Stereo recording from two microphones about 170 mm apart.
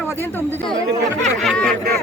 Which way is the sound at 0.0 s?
15° left (ahead or behind).